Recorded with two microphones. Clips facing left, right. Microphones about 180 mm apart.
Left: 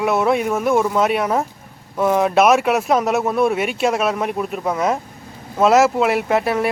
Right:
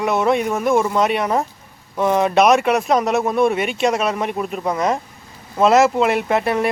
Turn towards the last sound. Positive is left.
turn(degrees=5)  # may be behind; listen again after turning